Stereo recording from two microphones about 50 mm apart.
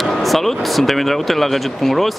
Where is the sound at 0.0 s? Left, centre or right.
Centre.